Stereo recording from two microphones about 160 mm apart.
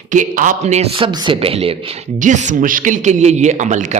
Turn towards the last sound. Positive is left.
turn(degrees=-50)  # may be behind; listen again after turning